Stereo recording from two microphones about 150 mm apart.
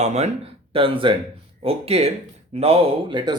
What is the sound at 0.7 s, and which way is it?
Speech, 35° right (ahead or behind).